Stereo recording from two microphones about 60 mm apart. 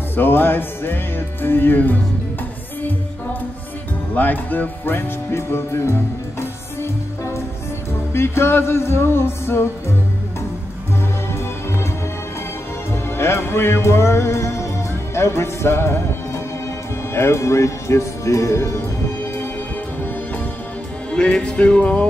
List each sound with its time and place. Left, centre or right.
0.1 s music: left
4.1 s music: left
8.1 s speech: left
13.2 s speech: left
17.1 s speech: left
21.1 s music: centre